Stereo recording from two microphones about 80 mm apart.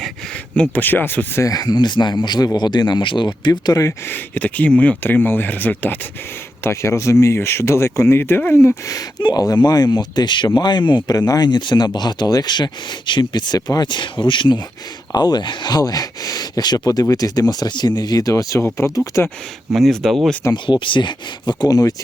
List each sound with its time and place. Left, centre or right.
0.5 s speech: centre
0.8 s speech: left
1.4 s speech: left
3.8 s speech: left
6.6 s speech: left
8.9 s speech: left
11.1 s speech: left
15.1 s speech: left
15.8 s speech: left
19.7 s speech: centre
20.5 s speech: left